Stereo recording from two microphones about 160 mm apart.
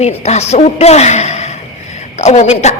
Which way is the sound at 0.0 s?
40° left (ahead or behind).